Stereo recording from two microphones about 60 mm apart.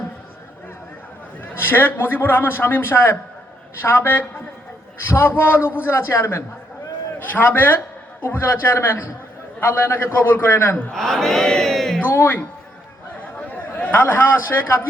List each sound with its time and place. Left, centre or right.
1.5 s a man's voice: left
7.2 s a man's voice: left
10.9 s chant: centre
12.0 s speech: left
13.5 s a man's voice: left